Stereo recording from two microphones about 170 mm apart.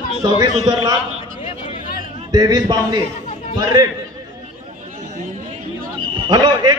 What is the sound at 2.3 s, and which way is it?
A man's voice, 25° right (ahead or behind).